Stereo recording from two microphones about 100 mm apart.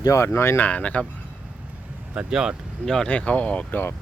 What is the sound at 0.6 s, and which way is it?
Speech, 15° left (ahead or behind).